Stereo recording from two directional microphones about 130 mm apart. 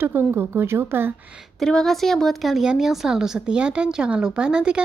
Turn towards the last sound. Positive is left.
turn(degrees=-5)  # may be behind; listen again after turning